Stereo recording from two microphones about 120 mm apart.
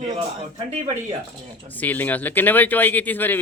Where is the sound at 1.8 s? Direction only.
15° left (ahead or behind).